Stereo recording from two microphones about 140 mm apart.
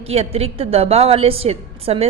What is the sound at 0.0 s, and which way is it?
A woman's voice, 45° right (ahead or behind).